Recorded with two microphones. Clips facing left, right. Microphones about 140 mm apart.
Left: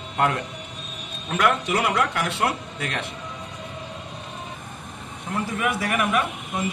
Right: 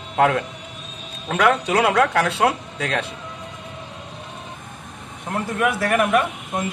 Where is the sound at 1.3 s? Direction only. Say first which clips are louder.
Right 4 dB; 75° right (ahead or behind).